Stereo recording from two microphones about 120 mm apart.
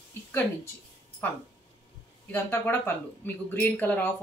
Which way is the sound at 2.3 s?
15° left (ahead or behind).